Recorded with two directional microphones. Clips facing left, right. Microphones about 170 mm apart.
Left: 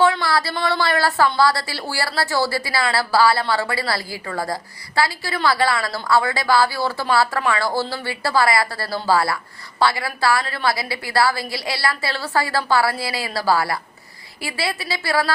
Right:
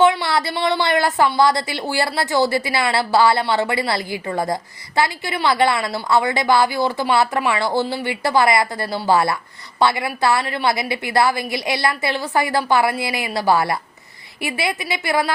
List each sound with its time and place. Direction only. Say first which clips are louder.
0.0 s a woman's voice: right 2 dB; 20° right (ahead or behind)